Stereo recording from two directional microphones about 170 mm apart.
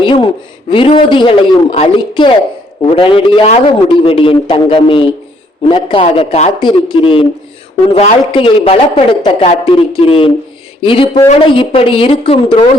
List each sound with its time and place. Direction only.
0.0 s a man's voice: 30° left (ahead or behind)
8.3 s speech: 30° left (ahead or behind)